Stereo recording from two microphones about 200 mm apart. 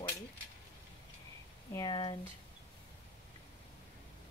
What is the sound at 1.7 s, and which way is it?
Speech, 20° left (ahead or behind).